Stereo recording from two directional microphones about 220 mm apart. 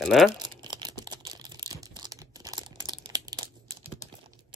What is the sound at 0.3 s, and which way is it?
Crumpling, 20° right (ahead or behind).